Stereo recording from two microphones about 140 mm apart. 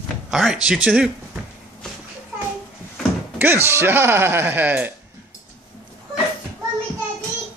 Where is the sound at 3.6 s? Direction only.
15° right (ahead or behind).